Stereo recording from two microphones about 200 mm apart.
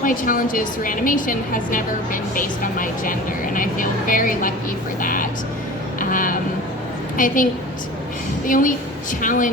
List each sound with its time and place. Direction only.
0.0 s speech: 45° left (ahead or behind)
8.4 s speech: 40° left (ahead or behind)